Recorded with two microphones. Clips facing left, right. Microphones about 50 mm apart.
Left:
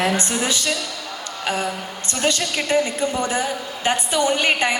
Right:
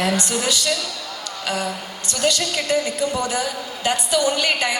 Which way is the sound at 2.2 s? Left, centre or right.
Left.